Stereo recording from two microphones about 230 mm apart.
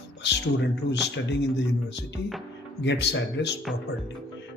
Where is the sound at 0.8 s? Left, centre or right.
Left.